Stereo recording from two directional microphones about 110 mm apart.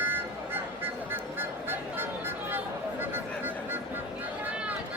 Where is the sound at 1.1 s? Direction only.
20° right (ahead or behind).